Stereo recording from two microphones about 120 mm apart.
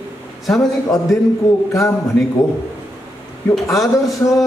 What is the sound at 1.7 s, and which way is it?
Speech, 25° left (ahead or behind).